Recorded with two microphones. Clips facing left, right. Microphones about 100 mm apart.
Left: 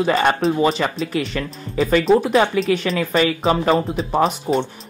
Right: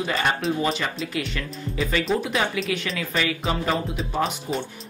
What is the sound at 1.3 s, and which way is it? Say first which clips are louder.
Speech: left 6 dB; 40° left (ahead or behind).